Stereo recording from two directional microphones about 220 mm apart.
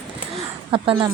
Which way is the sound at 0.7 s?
25° right (ahead or behind).